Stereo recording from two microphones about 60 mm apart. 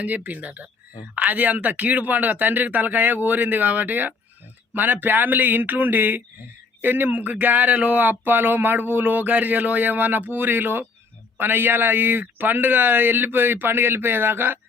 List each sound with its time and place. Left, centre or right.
0.0 s speech: right